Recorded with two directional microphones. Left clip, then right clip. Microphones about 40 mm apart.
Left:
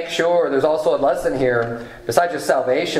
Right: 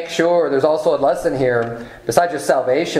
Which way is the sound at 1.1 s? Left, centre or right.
Right.